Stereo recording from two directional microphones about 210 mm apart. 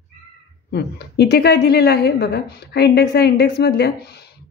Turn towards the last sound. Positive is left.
turn(degrees=50)  # may be behind; listen again after turning